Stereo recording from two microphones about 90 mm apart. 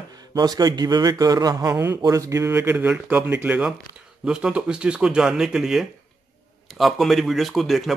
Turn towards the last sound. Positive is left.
turn(degrees=0)  # may be behind; listen again after turning